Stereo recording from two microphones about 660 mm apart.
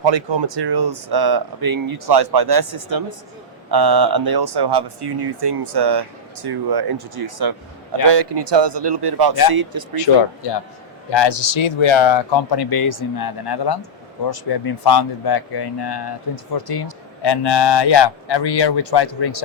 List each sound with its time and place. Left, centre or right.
0.0 s speech: right
10.1 s speech: left
12.7 s speech: left